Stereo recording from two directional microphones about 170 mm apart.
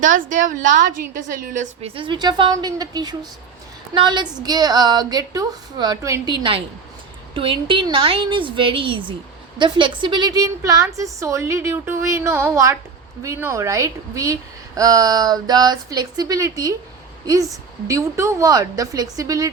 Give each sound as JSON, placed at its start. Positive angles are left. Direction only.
{"t": 0.0, "sound": "a woman's voice", "side_deg": -50}
{"t": 2.0, "sound": "a woman's voice", "side_deg": -25}
{"t": 17.8, "sound": "a woman's voice", "side_deg": -15}